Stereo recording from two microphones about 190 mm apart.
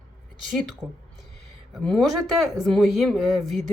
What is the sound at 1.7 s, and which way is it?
Speech, centre (ahead or behind).